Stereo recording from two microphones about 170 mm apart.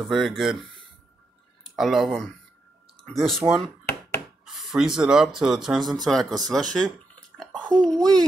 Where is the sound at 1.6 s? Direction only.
Centre (ahead or behind).